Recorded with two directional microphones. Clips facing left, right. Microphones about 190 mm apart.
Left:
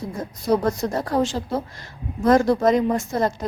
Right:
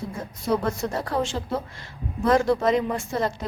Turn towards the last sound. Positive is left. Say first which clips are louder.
# left 4 dB
turn(degrees=40)  # may be behind; listen again after turning